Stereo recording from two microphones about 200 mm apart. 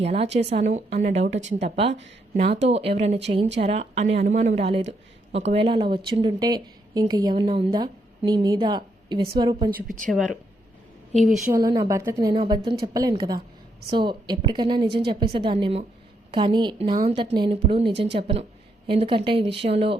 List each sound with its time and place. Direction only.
0.0 s a woman's voice: 30° right (ahead or behind)
11.1 s a woman's voice: centre (ahead or behind)
11.5 s a woman's voice: 20° right (ahead or behind)
12.3 s a woman's voice: 25° right (ahead or behind)